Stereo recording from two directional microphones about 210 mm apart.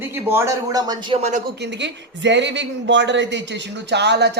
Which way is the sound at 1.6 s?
55° right (ahead or behind).